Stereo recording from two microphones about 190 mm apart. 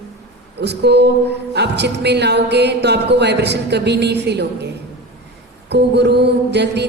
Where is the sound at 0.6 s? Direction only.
60° right (ahead or behind).